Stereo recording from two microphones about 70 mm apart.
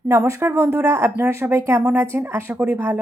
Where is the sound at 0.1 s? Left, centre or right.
Right.